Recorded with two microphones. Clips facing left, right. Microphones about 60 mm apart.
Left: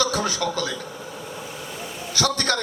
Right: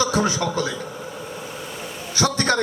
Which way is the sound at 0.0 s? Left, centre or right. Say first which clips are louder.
Right 2 dB; right.